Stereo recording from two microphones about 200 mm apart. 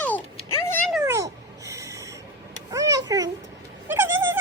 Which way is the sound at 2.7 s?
15° right (ahead or behind).